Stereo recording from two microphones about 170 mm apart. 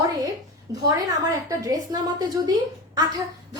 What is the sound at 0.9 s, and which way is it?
A child's voice, 20° right (ahead or behind).